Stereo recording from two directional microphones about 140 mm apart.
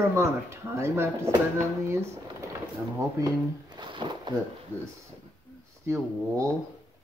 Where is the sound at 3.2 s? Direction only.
25° right (ahead or behind).